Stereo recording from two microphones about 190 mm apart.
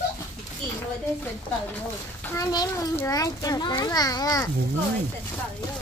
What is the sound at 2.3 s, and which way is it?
A child's voice, 20° left (ahead or behind).